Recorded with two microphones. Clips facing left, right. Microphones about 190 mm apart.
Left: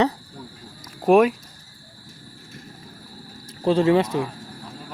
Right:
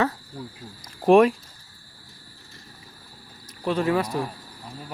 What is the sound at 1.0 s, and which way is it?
Speech, 5° left (ahead or behind).